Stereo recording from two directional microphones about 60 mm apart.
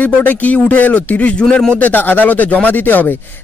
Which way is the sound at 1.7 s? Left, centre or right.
Left.